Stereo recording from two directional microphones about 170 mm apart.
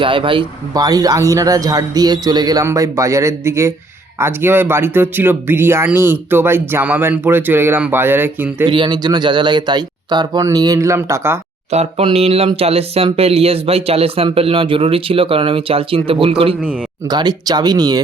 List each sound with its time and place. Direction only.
0.0 s speech: 30° right (ahead or behind); by 8.6 s 10° right (ahead or behind)
8.6 s speech: 30° right (ahead or behind)
11.7 s speech: 40° right (ahead or behind)